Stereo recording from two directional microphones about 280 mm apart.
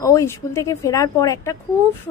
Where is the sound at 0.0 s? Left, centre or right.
Centre.